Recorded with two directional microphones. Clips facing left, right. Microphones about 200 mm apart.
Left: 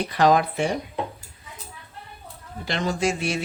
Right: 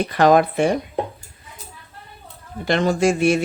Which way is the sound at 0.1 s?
55° right (ahead or behind).